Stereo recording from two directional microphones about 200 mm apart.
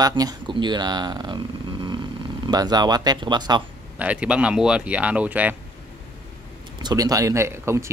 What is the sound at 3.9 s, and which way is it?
Speech, 5° right (ahead or behind).